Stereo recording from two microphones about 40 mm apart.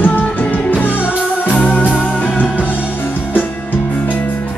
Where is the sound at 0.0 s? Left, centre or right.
Left.